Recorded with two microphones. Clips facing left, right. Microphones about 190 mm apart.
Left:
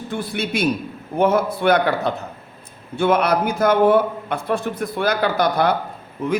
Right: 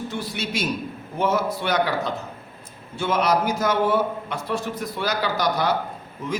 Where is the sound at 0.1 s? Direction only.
55° left (ahead or behind).